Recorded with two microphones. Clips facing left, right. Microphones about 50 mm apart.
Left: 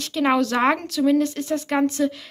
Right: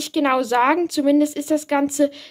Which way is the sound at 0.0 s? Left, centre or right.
Centre.